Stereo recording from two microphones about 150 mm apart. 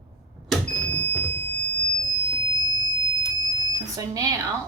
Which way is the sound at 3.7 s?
25° right (ahead or behind).